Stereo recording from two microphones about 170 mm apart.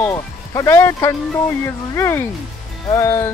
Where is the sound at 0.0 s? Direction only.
15° left (ahead or behind).